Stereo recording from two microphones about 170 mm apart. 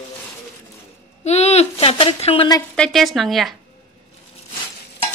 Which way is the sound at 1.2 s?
40° left (ahead or behind).